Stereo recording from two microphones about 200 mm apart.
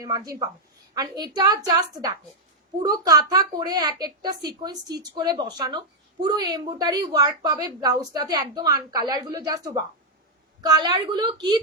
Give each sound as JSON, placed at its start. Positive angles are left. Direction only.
{"t": 0.0, "sound": "a woman's voice", "side_deg": -15}
{"t": 2.8, "sound": "a woman's voice", "side_deg": -20}